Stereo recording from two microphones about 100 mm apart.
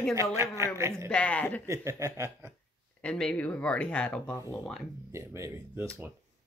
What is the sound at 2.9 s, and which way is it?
Speech, 10° left (ahead or behind).